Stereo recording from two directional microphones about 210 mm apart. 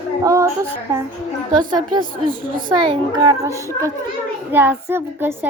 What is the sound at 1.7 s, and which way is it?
A child's voice, 20° right (ahead or behind).